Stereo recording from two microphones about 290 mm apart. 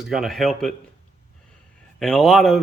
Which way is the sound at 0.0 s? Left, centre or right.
Centre.